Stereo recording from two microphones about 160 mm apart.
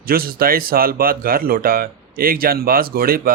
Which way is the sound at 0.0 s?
70° right (ahead or behind).